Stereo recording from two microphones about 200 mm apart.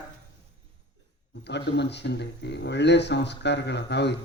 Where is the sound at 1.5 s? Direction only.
60° left (ahead or behind).